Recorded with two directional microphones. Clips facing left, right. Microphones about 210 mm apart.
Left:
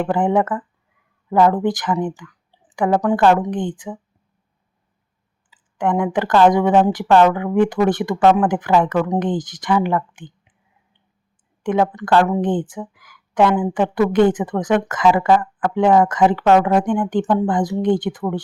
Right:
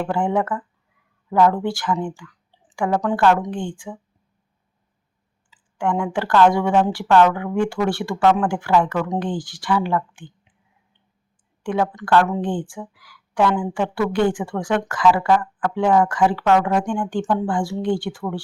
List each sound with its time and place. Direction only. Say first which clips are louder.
0.0 s speech: left 4 dB; 20° left (ahead or behind)
5.7 s speech: left 3 dB; 20° left (ahead or behind)
11.6 s speech: left 4 dB; 20° left (ahead or behind)